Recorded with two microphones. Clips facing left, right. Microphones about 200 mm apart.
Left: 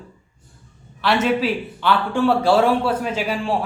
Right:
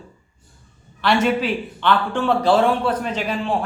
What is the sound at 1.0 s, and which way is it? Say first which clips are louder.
A man's voice: even; centre (ahead or behind).